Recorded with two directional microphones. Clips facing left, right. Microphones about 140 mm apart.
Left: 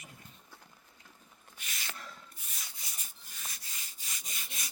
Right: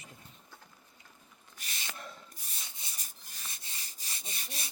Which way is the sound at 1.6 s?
35° right (ahead or behind).